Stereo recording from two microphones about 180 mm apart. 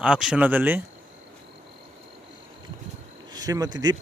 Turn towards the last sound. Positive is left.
turn(degrees=-20)  # may be behind; listen again after turning